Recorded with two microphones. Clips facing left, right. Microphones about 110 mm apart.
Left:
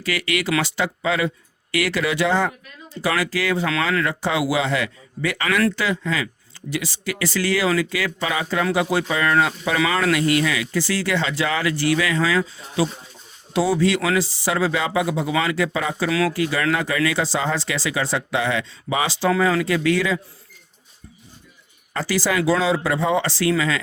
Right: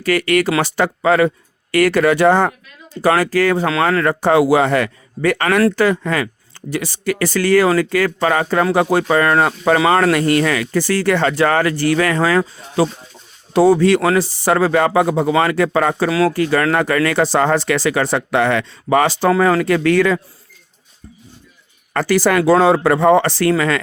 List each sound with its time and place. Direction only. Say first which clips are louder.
0.0 s speech: right 9 dB; 50° right (ahead or behind)
16.1 s speech: right 4 dB; 40° right (ahead or behind)
21.9 s speech: right 7 dB; 55° right (ahead or behind)